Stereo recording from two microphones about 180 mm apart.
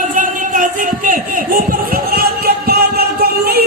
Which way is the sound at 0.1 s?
45° right (ahead or behind).